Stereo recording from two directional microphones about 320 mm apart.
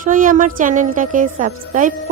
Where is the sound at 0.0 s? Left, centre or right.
Right.